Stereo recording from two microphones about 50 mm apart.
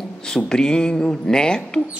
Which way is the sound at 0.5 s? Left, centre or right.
Centre.